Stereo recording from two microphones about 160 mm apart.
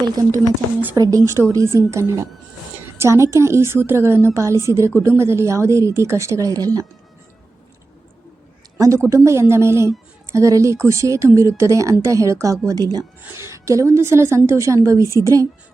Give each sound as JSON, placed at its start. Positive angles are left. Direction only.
{"t": 0.0, "sound": "speech", "side_deg": -25}
{"t": 9.0, "sound": "a woman's voice", "side_deg": -20}